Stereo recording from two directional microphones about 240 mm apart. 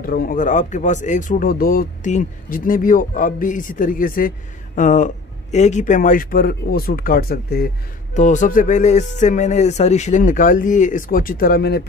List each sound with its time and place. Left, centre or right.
0.0 s speech: left